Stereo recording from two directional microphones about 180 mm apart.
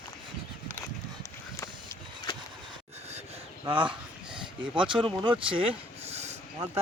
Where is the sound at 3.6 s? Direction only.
30° right (ahead or behind).